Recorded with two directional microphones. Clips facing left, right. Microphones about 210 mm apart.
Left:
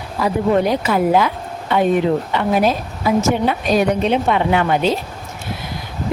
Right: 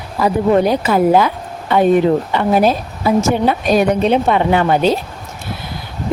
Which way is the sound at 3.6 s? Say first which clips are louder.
Right 2 dB; 45° right (ahead or behind).